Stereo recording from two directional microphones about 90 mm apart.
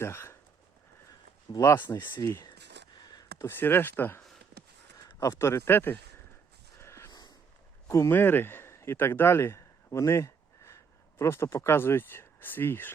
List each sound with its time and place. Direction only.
0.0 s speech: 30° left (ahead or behind)
1.5 s speech: 75° left (ahead or behind)
1.9 s speech: 30° left (ahead or behind)
3.0 s a sound: 45° left (ahead or behind)
3.3 s speech: 25° left (ahead or behind)
5.2 s speech: 30° left (ahead or behind)
6.7 s a sound: 30° left (ahead or behind)
7.1 s snort: 50° left (ahead or behind)
7.9 s speech: 35° left (ahead or behind)
8.1 s speech: 20° left (ahead or behind)